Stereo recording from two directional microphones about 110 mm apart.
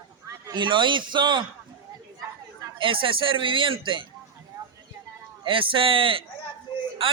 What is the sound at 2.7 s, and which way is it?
A man's voice, 50° right (ahead or behind).